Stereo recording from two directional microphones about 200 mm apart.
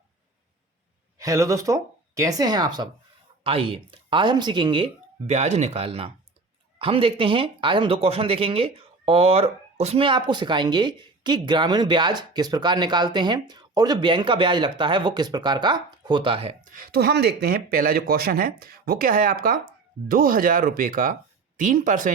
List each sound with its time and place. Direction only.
1.2 s speech: 15° right (ahead or behind); by 22.1 s 40° right (ahead or behind)